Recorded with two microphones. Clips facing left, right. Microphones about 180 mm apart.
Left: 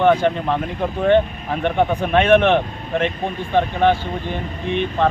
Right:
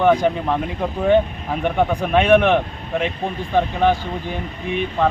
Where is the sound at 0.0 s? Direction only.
5° right (ahead or behind).